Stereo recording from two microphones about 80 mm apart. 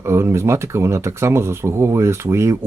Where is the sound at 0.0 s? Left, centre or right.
Right.